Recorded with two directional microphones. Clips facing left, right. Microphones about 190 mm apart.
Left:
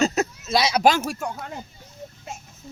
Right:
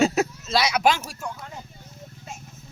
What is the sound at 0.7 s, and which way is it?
Speech, 35° left (ahead or behind).